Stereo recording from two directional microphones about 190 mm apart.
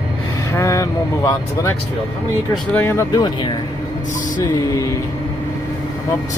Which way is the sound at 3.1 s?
25° left (ahead or behind).